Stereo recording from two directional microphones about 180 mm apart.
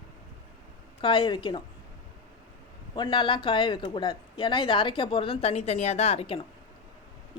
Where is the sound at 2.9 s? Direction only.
25° left (ahead or behind).